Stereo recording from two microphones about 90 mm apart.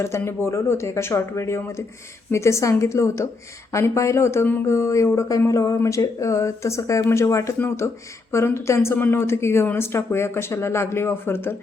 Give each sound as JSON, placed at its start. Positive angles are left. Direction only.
{"t": 0.0, "sound": "speech", "side_deg": 30}